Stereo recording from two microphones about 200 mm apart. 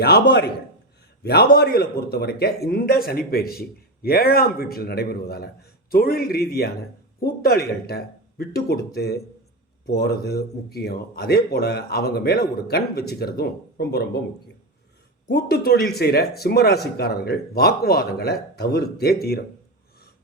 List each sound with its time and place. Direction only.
0.0 s a man's voice: 55° left (ahead or behind)